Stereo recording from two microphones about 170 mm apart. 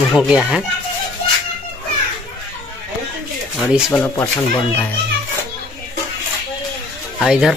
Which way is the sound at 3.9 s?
10° left (ahead or behind).